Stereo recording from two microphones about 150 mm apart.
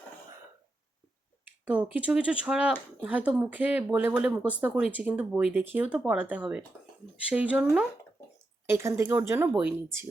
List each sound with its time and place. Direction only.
1.6 s speech: 10° right (ahead or behind)
8.6 s speech: 15° right (ahead or behind)